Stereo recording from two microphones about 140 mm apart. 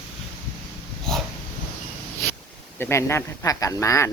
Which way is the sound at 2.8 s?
20° left (ahead or behind).